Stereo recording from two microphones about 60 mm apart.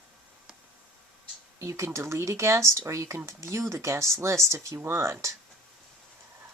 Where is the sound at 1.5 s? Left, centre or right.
Right.